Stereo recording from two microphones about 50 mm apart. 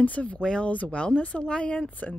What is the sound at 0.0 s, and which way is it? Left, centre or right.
Speech, left.